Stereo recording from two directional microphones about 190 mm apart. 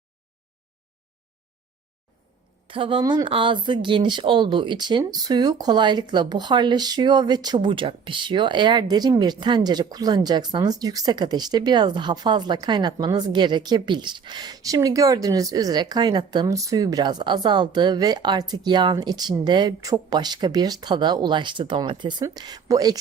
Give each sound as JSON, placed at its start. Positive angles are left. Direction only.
{"t": 2.6, "sound": "speech", "side_deg": -25}